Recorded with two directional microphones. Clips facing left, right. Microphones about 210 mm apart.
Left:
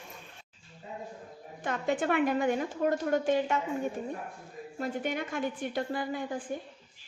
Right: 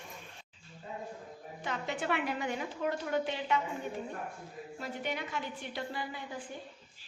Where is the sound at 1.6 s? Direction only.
50° left (ahead or behind).